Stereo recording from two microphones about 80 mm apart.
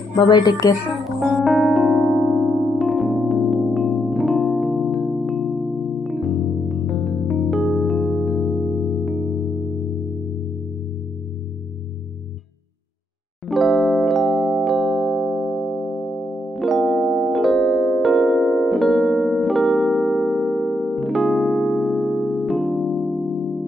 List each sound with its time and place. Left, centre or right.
0.1 s a woman's voice: left
1.2 s electric piano: centre
6.0 s music: centre
13.5 s music: centre
16.9 s keyboard: centre
17.2 s music: centre
21.3 s electric piano: centre